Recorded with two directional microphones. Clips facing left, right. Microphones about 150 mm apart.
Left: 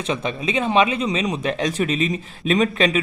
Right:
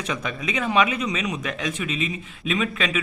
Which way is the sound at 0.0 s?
25° left (ahead or behind).